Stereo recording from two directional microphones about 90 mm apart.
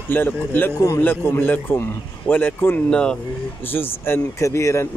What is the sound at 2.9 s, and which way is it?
Speech, 10° left (ahead or behind).